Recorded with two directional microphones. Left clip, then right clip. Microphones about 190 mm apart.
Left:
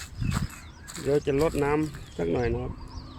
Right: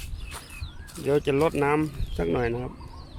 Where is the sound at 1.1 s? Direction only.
15° right (ahead or behind).